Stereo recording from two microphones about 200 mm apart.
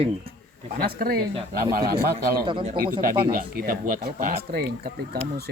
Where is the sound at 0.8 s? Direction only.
50° right (ahead or behind).